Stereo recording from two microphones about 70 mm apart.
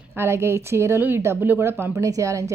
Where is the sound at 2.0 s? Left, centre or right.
Right.